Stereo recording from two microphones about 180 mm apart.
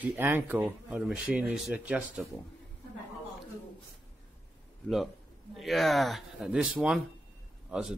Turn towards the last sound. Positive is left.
turn(degrees=-5)  # may be behind; listen again after turning